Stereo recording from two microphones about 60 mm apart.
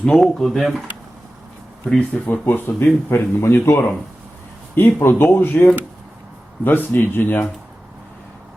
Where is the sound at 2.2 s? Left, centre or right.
Left.